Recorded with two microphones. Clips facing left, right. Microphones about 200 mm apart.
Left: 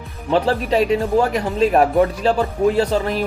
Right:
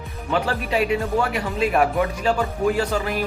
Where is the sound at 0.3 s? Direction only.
35° left (ahead or behind).